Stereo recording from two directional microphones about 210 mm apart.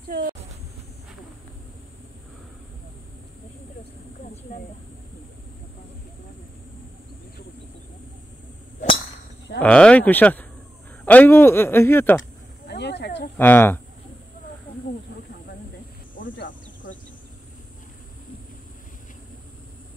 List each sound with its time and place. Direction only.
0.1 s speech: 40° right (ahead or behind)
9.6 s speech: 5° left (ahead or behind)
12.2 s a sound: 55° left (ahead or behind)
13.4 s speech: 10° left (ahead or behind)